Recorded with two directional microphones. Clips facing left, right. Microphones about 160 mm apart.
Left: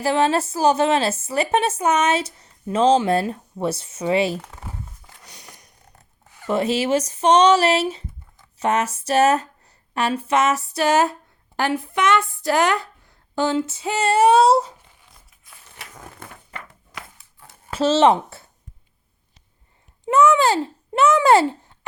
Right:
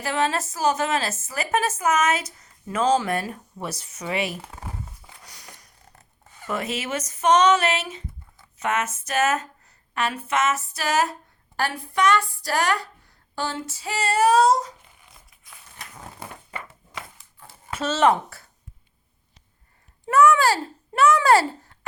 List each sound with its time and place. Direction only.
0.0 s a woman's voice: 30° left (ahead or behind)
5.2 s a sound: 20° left (ahead or behind)
6.5 s a woman's voice: 30° left (ahead or behind)
17.7 s speech: 30° left (ahead or behind)
20.1 s a child's voice: 20° left (ahead or behind)